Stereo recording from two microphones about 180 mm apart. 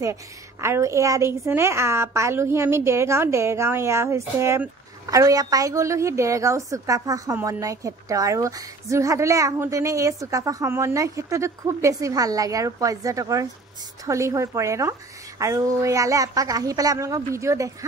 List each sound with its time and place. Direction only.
0.0 s a woman's voice: 15° right (ahead or behind)